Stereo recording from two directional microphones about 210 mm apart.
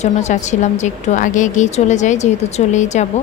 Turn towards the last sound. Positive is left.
turn(degrees=35)  # may be behind; listen again after turning